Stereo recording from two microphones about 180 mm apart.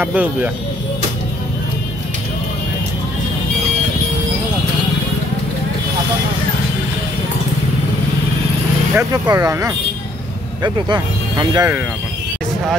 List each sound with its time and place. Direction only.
0.0 s speech: 10° right (ahead or behind)
8.9 s speech: 15° right (ahead or behind)